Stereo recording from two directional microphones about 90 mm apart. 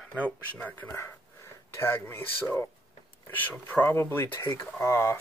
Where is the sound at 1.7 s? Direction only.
25° left (ahead or behind).